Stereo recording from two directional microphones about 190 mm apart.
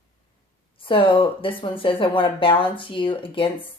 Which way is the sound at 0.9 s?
25° left (ahead or behind).